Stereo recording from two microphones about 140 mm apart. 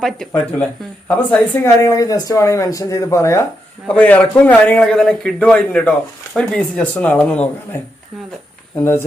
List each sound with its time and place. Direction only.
0.0 s speech: 5° left (ahead or behind)
1.0 s speech: 15° left (ahead or behind)
3.8 s a man's voice: 10° left (ahead or behind)